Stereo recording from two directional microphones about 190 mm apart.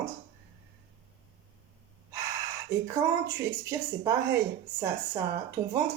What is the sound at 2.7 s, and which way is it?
Speech, 15° right (ahead or behind).